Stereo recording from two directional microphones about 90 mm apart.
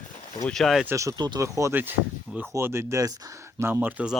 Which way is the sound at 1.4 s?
35° right (ahead or behind).